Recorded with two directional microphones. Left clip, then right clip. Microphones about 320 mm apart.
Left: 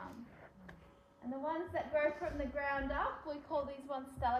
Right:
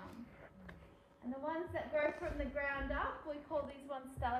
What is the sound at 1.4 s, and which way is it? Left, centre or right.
A woman's voice, left.